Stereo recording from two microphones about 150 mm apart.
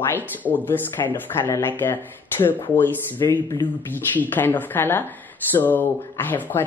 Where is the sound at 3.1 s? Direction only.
25° left (ahead or behind).